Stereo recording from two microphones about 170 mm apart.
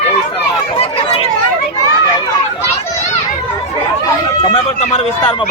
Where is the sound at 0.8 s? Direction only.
35° left (ahead or behind).